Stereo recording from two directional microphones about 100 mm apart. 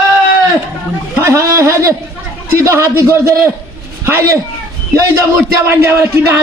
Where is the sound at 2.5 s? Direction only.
25° right (ahead or behind).